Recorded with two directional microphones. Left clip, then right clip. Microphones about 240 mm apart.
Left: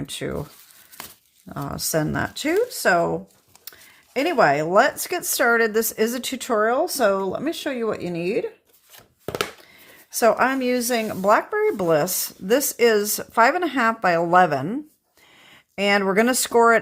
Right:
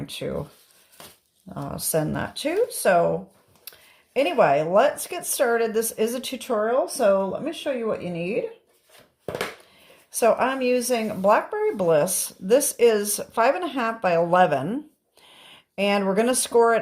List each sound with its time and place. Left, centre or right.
0.0 s speech: left
1.5 s a woman's voice: left
1.7 s speech: left
4.1 s a woman's voice: left
10.2 s speech: left